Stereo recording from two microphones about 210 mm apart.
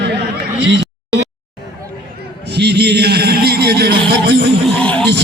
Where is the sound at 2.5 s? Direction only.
50° right (ahead or behind).